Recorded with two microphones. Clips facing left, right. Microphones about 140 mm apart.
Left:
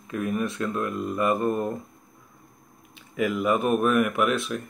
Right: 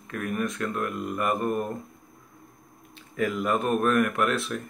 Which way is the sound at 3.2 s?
10° left (ahead or behind).